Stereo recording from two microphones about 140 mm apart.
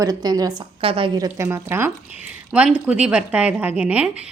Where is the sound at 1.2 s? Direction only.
20° right (ahead or behind).